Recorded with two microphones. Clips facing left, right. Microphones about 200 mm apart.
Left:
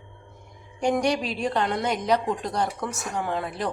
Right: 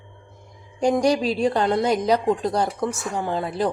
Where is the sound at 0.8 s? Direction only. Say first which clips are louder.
Right 4 dB; 35° right (ahead or behind).